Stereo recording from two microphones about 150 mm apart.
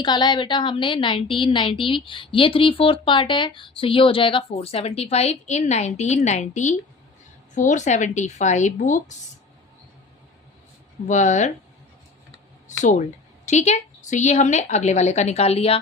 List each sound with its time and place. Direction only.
0.0 s a woman's voice: 30° left (ahead or behind); by 9.1 s 55° left (ahead or behind)
11.1 s a woman's voice: 55° left (ahead or behind)
12.8 s a woman's voice: 55° left (ahead or behind)